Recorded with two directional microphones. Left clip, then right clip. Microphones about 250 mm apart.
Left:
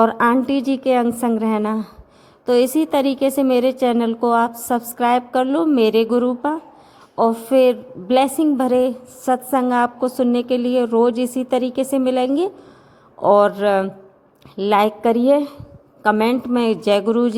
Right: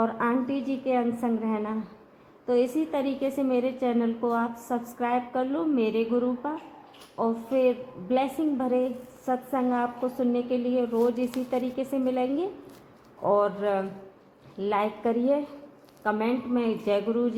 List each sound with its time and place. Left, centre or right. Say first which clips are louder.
0.0 s a woman's voice: left 11 dB; left